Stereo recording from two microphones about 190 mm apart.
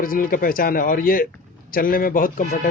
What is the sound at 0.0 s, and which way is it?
Speech, 50° left (ahead or behind).